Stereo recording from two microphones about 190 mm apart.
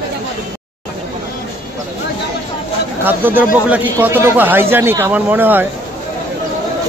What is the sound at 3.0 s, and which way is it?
A man's voice, 10° right (ahead or behind).